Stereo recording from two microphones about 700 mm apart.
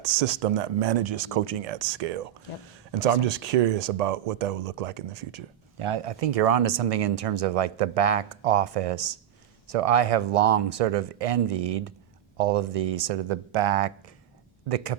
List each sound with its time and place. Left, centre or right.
0.0 s speech: right
5.8 s speech: right